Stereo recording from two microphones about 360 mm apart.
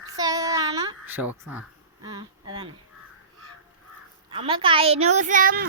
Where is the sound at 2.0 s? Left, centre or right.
Centre.